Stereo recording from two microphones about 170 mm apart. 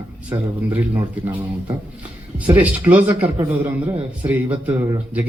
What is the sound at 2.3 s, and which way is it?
A man's voice, 10° right (ahead or behind).